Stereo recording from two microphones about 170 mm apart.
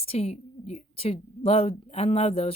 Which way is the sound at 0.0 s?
35° left (ahead or behind).